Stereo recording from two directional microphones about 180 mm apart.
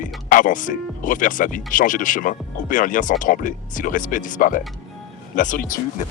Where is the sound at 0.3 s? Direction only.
45° left (ahead or behind).